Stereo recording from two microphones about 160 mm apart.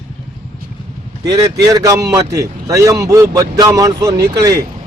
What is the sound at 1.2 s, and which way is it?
A man's voice, 20° right (ahead or behind).